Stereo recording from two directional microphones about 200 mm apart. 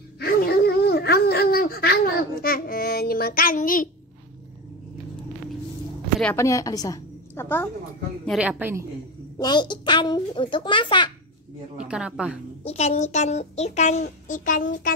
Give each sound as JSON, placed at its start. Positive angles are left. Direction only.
{"t": 0.2, "sound": "a sound", "side_deg": 50}
{"t": 2.4, "sound": "child singing", "side_deg": 50}
{"t": 6.3, "sound": "a woman's voice", "side_deg": 15}
{"t": 8.3, "sound": "a woman's voice", "side_deg": -5}
{"t": 9.4, "sound": "a child's voice", "side_deg": 20}
{"t": 11.8, "sound": "a woman's voice", "side_deg": -5}
{"t": 12.6, "sound": "a child's voice", "side_deg": 35}